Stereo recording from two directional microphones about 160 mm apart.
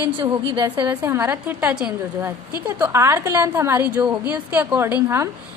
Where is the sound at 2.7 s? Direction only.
20° right (ahead or behind).